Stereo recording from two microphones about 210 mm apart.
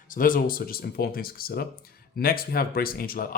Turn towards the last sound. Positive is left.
turn(degrees=45)  # may be behind; listen again after turning